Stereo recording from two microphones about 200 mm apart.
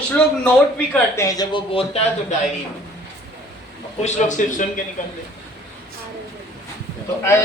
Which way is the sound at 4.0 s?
35° left (ahead or behind).